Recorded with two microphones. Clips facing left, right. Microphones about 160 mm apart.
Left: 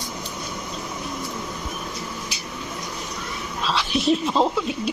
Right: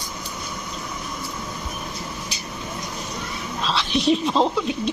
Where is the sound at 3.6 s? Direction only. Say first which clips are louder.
Right 1 dB; 10° left (ahead or behind).